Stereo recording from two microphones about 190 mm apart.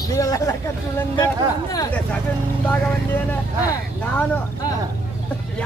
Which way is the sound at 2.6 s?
10° left (ahead or behind).